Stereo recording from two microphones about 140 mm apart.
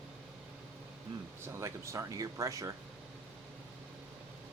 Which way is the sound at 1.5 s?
20° right (ahead or behind).